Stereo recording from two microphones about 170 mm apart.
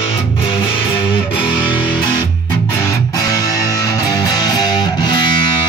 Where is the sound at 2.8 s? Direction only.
20° left (ahead or behind).